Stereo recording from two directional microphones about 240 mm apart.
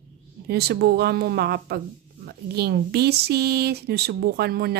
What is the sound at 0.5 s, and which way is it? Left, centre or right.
A woman's voice, right.